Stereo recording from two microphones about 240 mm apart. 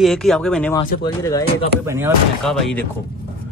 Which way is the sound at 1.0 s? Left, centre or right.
Centre.